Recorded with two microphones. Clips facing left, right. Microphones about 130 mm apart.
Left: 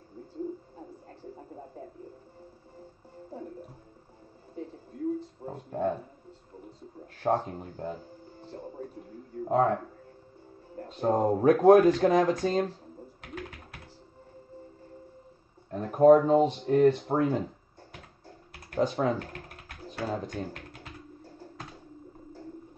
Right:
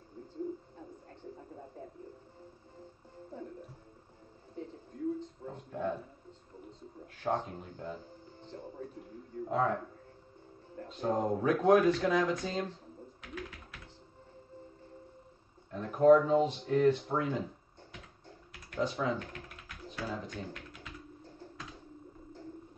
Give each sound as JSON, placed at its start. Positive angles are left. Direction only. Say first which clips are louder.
{"t": 5.4, "sound": "a sound", "louder": "left 6 dB", "side_deg": 40}
{"t": 7.2, "sound": "speech", "louder": "left 6 dB", "side_deg": 40}
{"t": 10.8, "sound": "a sound", "louder": "left 5 dB", "side_deg": 45}
{"t": 11.1, "sound": "speech", "louder": "left 8 dB", "side_deg": 45}
{"t": 13.2, "sound": "typing", "louder": "left 3 dB", "side_deg": 50}
{"t": 15.7, "sound": "speech", "louder": "left 4 dB", "side_deg": 45}
{"t": 18.5, "sound": "speech", "louder": "left 6 dB", "side_deg": 40}
{"t": 19.7, "sound": "music", "louder": "left 6 dB", "side_deg": 50}